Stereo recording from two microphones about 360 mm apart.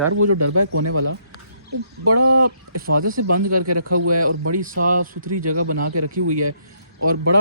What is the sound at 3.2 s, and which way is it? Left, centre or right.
Speech, right.